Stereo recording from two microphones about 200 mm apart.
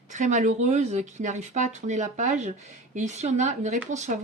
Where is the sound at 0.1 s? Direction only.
35° right (ahead or behind).